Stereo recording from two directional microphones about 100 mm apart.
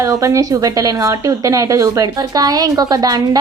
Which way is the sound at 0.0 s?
35° right (ahead or behind).